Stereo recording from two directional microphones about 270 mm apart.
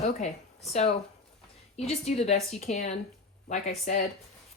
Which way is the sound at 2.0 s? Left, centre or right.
Left.